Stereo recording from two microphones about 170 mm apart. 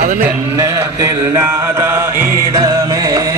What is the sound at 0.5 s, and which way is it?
Music, 20° right (ahead or behind).